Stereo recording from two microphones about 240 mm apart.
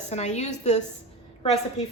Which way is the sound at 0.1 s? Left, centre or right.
Left.